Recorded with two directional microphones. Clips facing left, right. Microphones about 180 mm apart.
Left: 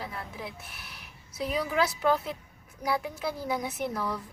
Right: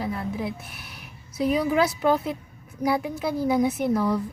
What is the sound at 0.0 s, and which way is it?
Music, 20° right (ahead or behind).